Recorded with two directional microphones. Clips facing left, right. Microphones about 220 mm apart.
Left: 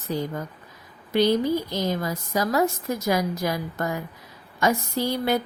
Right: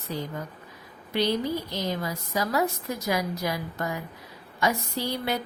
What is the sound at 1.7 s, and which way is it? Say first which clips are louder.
Speech: left 4 dB; 45° left (ahead or behind).